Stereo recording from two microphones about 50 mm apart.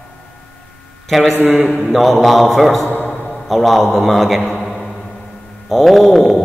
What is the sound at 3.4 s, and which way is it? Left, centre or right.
Speech, centre.